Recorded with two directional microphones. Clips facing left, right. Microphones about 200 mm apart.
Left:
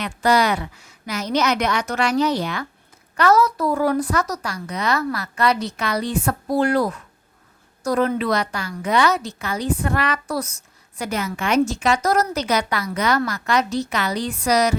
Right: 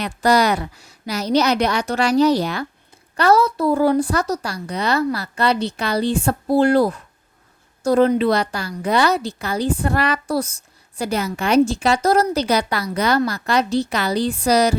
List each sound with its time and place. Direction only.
0.0 s a woman's voice: 40° right (ahead or behind)